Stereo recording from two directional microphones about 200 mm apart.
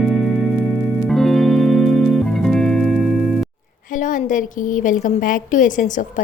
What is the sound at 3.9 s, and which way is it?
A woman's voice, 40° left (ahead or behind).